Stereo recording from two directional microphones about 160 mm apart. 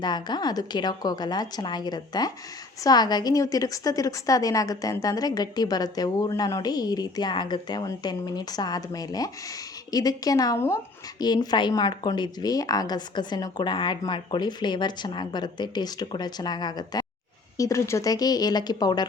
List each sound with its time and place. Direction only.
0.0 s speech: 25° left (ahead or behind)